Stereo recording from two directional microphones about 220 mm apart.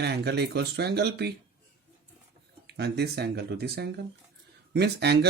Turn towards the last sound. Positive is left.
turn(degrees=-50)  # may be behind; listen again after turning